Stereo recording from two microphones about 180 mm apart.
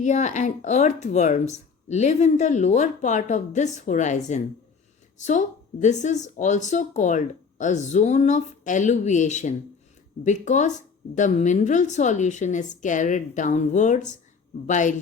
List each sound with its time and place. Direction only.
0.0 s speech: 40° left (ahead or behind)